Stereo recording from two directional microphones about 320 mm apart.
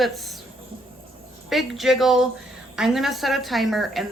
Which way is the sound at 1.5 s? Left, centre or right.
Centre.